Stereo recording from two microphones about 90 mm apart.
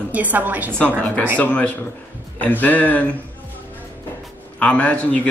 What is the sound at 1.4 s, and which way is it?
Speech, 15° left (ahead or behind).